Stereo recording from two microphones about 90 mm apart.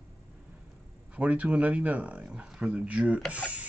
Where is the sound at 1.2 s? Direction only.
15° right (ahead or behind).